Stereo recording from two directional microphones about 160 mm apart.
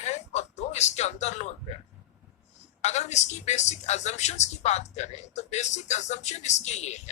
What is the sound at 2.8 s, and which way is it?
A woman's voice, 45° left (ahead or behind).